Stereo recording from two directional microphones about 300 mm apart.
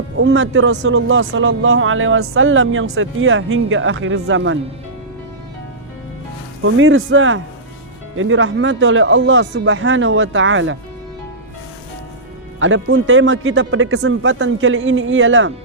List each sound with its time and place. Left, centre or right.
0.2 s speech: right
6.6 s speech: right
12.5 s speech: right